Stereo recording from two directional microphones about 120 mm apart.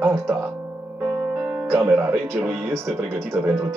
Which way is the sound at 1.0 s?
35° right (ahead or behind).